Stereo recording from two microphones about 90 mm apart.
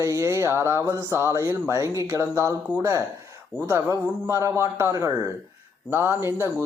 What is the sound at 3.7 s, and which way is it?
Speech, 25° right (ahead or behind).